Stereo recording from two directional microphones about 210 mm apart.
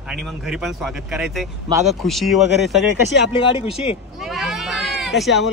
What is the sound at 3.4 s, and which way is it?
Speech, 25° left (ahead or behind).